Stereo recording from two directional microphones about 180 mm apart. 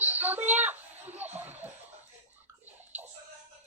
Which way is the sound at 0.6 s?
10° right (ahead or behind).